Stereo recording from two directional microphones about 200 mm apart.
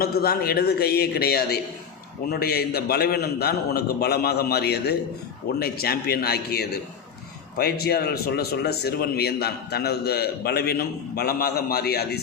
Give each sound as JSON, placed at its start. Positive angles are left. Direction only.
{"t": 0.0, "sound": "a man's voice", "side_deg": 50}